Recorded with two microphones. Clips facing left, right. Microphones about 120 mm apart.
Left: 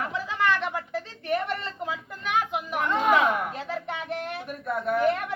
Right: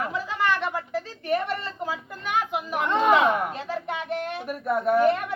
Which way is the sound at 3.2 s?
20° right (ahead or behind).